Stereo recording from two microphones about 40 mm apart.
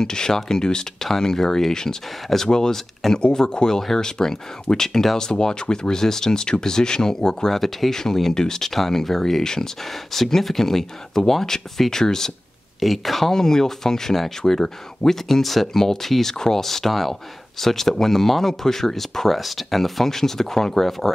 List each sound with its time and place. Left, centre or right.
0.0 s speech: centre
7.5 s speech: centre
12.8 s speech: centre
13.3 s speech: centre